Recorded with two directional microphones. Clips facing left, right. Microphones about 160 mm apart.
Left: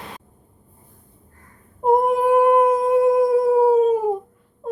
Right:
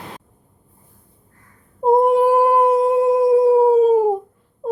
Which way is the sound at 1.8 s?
30° right (ahead or behind).